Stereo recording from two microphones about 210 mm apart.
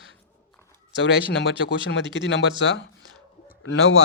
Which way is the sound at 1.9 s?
65° left (ahead or behind).